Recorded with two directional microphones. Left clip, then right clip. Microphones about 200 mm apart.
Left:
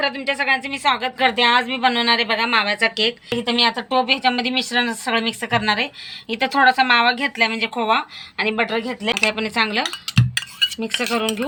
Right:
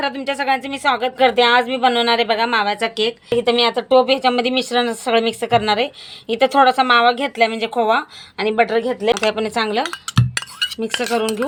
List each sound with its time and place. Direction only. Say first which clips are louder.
0.0 s a woman's voice: even; 45° right (ahead or behind)
9.3 s cutlery: right 1 dB; 50° right (ahead or behind)